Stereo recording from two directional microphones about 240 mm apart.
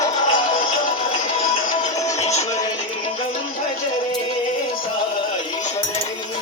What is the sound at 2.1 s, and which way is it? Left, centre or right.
Music, left.